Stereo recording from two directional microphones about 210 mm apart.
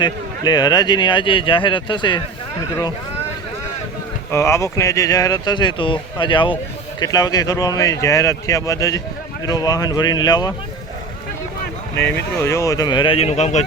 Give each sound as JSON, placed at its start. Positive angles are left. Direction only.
{"t": 0.0, "sound": "speech", "side_deg": 20}
{"t": 4.3, "sound": "speech", "side_deg": 10}
{"t": 11.9, "sound": "speech", "side_deg": 10}